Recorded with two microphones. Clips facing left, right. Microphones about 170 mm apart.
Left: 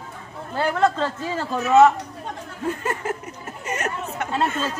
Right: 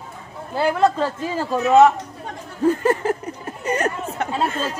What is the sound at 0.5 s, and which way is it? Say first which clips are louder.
Speech: right 3 dB; 10° right (ahead or behind).